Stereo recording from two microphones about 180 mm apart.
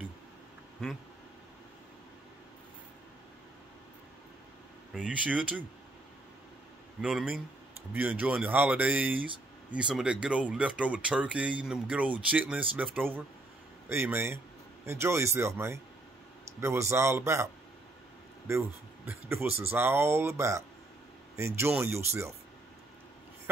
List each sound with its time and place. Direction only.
0.8 s a man's voice: centre (ahead or behind)
4.9 s speech: 5° right (ahead or behind)
7.0 s a man's voice: 5° right (ahead or behind)
18.5 s speech: 15° right (ahead or behind)